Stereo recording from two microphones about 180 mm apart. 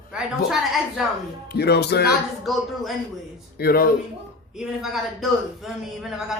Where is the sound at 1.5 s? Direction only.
65° left (ahead or behind).